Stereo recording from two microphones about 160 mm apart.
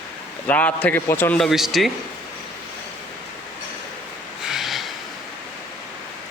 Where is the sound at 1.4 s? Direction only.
Centre (ahead or behind).